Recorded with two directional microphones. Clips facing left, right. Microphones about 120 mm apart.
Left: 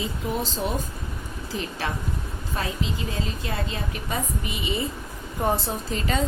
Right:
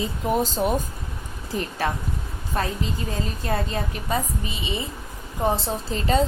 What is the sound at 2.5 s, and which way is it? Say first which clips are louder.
A woman's voice: right 3 dB; 40° right (ahead or behind).